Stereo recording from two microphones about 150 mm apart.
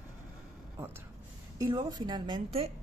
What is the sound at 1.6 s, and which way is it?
Speech, 25° right (ahead or behind).